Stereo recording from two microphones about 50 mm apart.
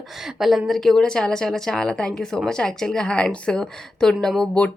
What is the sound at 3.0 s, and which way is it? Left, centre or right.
Speech, left.